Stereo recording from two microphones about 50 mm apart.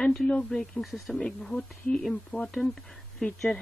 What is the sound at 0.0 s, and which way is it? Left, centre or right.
Speech, centre.